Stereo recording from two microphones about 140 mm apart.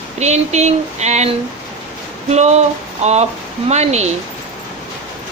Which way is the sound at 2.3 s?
50° right (ahead or behind).